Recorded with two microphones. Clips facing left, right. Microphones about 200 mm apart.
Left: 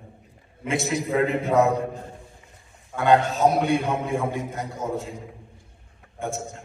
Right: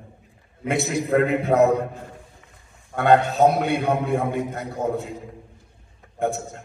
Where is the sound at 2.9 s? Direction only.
60° right (ahead or behind).